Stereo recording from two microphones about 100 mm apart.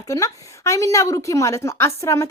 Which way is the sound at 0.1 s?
30° left (ahead or behind).